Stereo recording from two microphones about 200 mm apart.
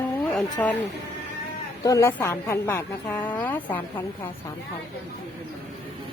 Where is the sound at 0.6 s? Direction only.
10° left (ahead or behind).